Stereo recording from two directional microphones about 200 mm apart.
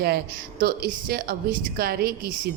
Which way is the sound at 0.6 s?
50° right (ahead or behind).